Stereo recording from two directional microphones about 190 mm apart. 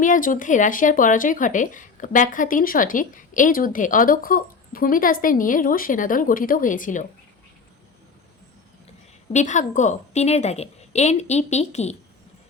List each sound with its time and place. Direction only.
0.0 s speech: 45° left (ahead or behind)
9.3 s a woman's voice: 40° left (ahead or behind)